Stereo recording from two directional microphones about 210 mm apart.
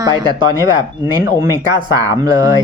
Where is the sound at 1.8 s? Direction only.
20° right (ahead or behind).